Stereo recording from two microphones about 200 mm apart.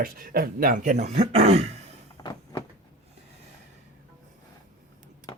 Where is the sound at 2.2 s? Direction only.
20° left (ahead or behind).